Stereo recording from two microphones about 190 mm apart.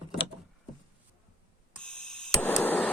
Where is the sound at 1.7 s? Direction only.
5° left (ahead or behind).